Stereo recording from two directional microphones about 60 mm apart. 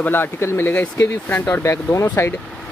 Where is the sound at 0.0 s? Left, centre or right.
Left.